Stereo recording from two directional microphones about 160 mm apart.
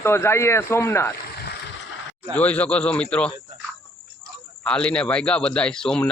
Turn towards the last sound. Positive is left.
turn(degrees=5)  # may be behind; listen again after turning